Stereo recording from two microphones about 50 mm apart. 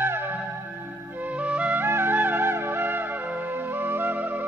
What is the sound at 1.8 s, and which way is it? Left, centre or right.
Music, right.